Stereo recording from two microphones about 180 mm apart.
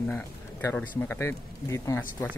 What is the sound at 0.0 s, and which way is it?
Speech, 15° left (ahead or behind).